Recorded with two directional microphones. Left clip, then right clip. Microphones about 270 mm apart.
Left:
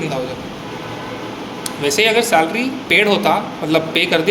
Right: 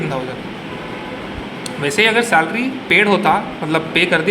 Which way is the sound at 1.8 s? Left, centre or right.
Centre.